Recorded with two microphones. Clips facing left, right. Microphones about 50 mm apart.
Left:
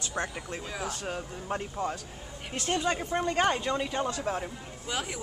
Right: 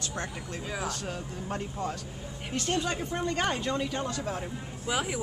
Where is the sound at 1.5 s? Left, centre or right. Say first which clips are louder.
Left 2 dB; centre.